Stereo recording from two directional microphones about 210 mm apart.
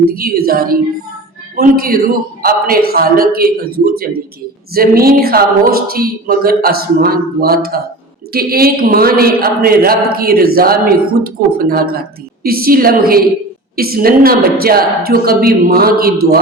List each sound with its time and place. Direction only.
0.0 s speech: 45° right (ahead or behind)